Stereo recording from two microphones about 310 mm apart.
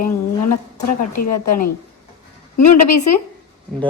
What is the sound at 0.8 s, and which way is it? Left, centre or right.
A woman's voice, left.